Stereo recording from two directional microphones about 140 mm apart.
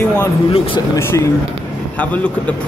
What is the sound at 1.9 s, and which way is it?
Speech, 10° left (ahead or behind).